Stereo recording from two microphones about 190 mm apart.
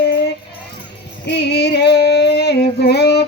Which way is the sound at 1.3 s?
60° left (ahead or behind).